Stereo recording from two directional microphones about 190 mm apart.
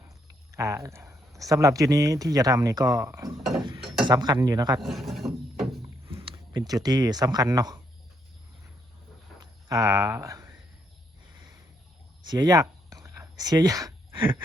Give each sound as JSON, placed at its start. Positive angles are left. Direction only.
{"t": 0.5, "sound": "speech", "side_deg": -15}
{"t": 3.6, "sound": "mechanisms", "side_deg": -25}
{"t": 4.0, "sound": "speech", "side_deg": -20}
{"t": 4.8, "sound": "mechanisms", "side_deg": 0}
{"t": 6.2, "sound": "speech", "side_deg": -25}
{"t": 9.6, "sound": "speech", "side_deg": -15}
{"t": 12.2, "sound": "a sound", "side_deg": -20}